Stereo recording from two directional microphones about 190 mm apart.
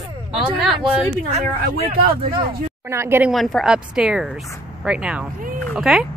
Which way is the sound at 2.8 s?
15° right (ahead or behind).